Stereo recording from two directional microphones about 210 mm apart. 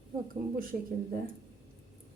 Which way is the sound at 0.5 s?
45° right (ahead or behind).